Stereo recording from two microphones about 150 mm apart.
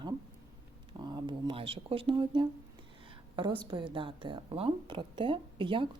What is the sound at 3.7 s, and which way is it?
A woman's voice, 35° right (ahead or behind).